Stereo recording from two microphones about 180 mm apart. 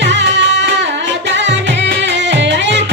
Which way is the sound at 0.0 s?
80° right.